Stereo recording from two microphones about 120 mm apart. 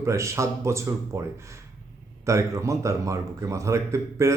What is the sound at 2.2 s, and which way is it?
Speech, 25° right (ahead or behind).